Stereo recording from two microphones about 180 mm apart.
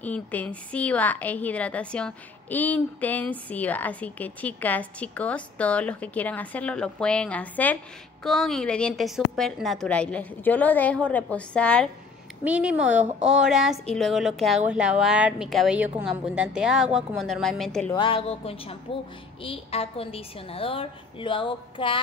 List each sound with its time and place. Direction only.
0.0 s a woman's voice: 10° left (ahead or behind)
12.4 s speech: 10° right (ahead or behind)
17.9 s a woman's voice: 30° left (ahead or behind)